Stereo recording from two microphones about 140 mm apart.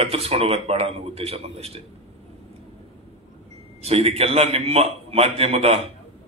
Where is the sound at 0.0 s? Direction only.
45° right (ahead or behind).